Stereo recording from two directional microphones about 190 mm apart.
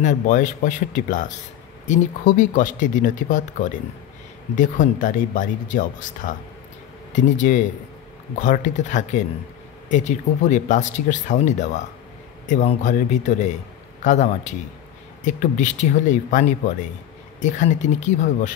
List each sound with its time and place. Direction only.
0.0 s speech: 40° left (ahead or behind)